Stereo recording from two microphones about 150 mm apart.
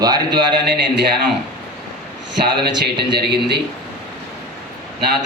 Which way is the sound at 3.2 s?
90° right.